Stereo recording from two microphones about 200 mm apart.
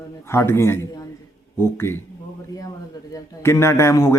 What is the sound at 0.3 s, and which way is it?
Speech, 10° left (ahead or behind).